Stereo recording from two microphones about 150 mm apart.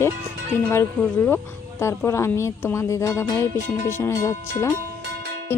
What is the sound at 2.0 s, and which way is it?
Music, 15° left (ahead or behind).